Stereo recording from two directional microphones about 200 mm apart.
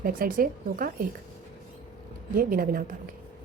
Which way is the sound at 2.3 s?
45° right (ahead or behind).